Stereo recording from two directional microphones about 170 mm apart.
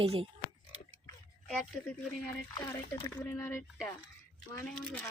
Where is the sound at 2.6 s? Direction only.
15° left (ahead or behind).